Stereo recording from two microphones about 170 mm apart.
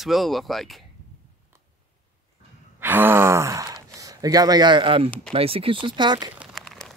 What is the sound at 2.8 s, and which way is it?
Speech, 10° right (ahead or behind).